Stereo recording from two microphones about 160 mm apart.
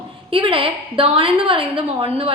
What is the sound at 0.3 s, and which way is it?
A woman's voice, 35° right (ahead or behind).